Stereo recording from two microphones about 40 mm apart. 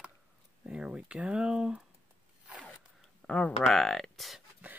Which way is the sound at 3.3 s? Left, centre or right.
Left.